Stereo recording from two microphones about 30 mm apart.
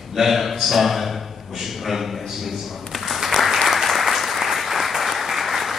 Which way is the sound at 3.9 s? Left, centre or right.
Centre.